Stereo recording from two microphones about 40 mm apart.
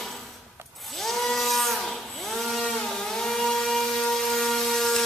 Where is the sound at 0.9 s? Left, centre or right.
Centre.